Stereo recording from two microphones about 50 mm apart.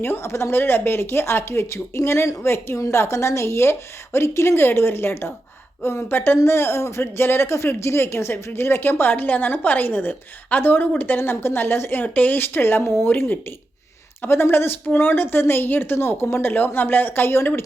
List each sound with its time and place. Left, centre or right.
0.0 s a woman's voice: left
11.2 s a woman's voice: left
12.0 s speech: left
12.4 s a woman's voice: left